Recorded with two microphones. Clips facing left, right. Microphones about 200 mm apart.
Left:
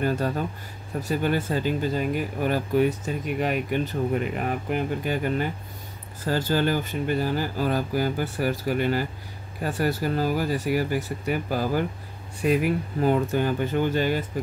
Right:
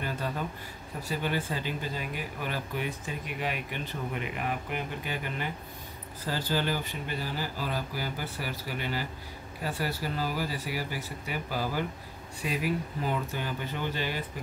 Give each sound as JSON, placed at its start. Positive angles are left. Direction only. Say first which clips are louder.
{"t": 0.0, "sound": "speech", "louder": "left 8 dB", "side_deg": 45}